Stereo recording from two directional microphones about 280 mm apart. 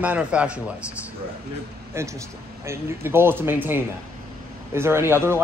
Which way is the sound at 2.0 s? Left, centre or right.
Centre.